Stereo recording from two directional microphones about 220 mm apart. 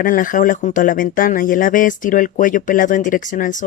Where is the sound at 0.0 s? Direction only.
40° left (ahead or behind).